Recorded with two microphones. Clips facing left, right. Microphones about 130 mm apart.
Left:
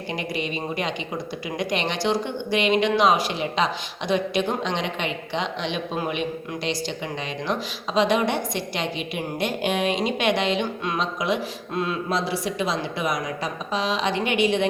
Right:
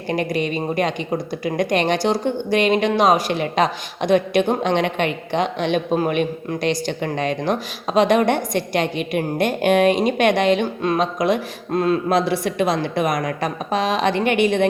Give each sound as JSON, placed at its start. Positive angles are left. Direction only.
{"t": 0.1, "sound": "speech", "side_deg": -50}